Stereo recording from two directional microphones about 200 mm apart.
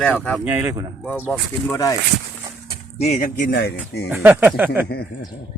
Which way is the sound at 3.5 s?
55° left (ahead or behind).